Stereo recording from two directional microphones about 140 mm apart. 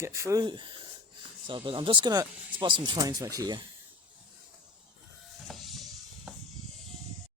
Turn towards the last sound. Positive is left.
turn(degrees=0)  # may be behind; listen again after turning